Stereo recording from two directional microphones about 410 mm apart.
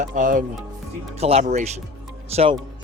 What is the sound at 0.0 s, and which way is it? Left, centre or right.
Speech, centre.